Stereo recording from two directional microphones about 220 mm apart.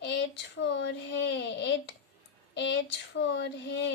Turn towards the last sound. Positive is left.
turn(degrees=55)  # may be behind; listen again after turning